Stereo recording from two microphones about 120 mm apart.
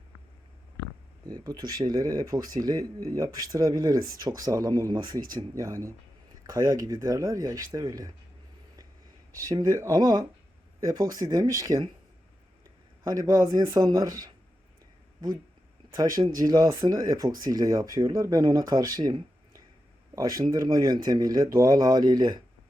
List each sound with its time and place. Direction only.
1.3 s speech: 30° right (ahead or behind)
9.4 s speech: 30° right (ahead or behind)
13.1 s speech: 30° right (ahead or behind)
16.0 s speech: 30° right (ahead or behind)